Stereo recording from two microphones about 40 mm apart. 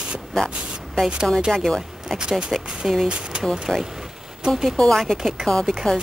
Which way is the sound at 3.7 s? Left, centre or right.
Centre.